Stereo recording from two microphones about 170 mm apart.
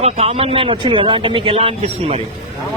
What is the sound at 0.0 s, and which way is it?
A man's voice, 35° right (ahead or behind).